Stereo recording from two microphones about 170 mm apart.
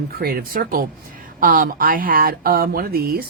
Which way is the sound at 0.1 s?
60° right (ahead or behind).